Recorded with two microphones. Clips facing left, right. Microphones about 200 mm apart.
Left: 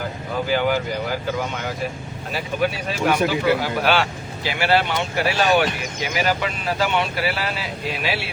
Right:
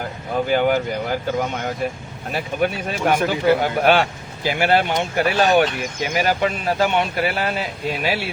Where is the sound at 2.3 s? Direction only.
55° right (ahead or behind).